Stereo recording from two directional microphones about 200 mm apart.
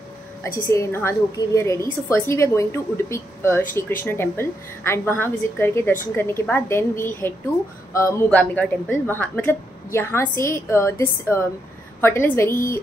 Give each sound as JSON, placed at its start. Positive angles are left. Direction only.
{"t": 0.4, "sound": "a woman's voice", "side_deg": 15}